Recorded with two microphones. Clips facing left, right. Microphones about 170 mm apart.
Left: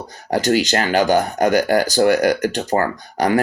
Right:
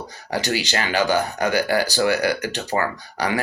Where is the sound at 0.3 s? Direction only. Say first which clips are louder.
Left 7 dB; 45° left (ahead or behind).